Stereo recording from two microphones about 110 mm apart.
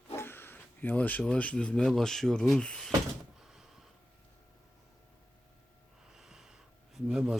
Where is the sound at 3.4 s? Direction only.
5° right (ahead or behind).